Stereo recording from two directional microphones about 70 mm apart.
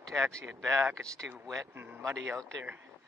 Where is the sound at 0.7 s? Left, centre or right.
Right.